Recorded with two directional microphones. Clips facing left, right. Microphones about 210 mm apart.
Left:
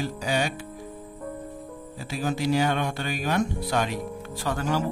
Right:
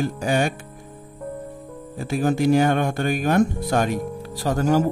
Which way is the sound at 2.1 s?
50° right (ahead or behind).